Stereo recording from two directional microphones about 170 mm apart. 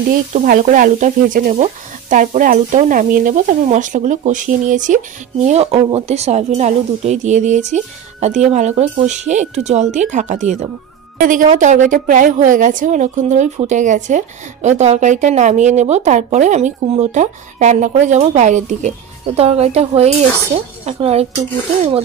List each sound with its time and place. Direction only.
0.1 s sizzle: 55° right (ahead or behind)
8.4 s speech: 40° right (ahead or behind)
9.3 s sizzle: 40° right (ahead or behind)
20.8 s speech: 35° right (ahead or behind)